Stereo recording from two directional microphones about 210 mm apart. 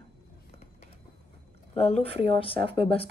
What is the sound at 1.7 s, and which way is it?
Speech, 30° left (ahead or behind).